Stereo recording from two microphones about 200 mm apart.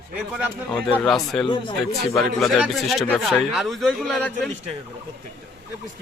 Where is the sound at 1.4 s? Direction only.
25° left (ahead or behind).